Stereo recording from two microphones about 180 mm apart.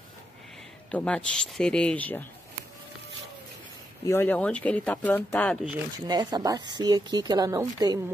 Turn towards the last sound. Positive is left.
turn(degrees=-20)  # may be behind; listen again after turning